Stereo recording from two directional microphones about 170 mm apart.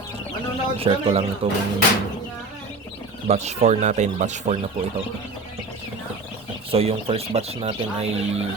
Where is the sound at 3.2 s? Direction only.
40° right (ahead or behind).